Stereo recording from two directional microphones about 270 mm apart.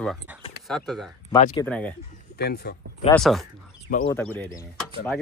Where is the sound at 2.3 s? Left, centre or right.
Left.